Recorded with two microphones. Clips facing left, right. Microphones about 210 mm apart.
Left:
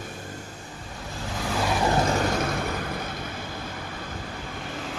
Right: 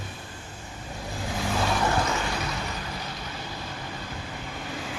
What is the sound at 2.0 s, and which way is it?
Vehicle, 40° left (ahead or behind).